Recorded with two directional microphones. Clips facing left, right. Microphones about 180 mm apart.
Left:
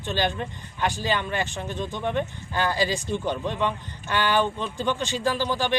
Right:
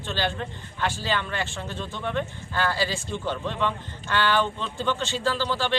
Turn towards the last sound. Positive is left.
turn(degrees=15)  # may be behind; listen again after turning